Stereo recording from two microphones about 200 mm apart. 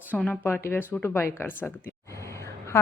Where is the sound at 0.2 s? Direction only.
10° left (ahead or behind).